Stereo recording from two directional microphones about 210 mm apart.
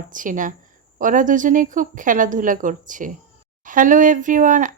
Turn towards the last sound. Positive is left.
turn(degrees=-40)  # may be behind; listen again after turning